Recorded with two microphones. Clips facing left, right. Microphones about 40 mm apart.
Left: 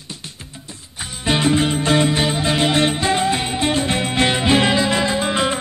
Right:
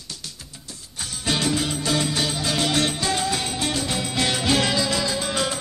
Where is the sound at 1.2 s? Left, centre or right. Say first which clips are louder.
Left 6 dB; left.